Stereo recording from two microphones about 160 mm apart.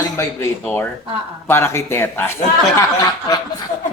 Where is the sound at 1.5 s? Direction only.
15° left (ahead or behind).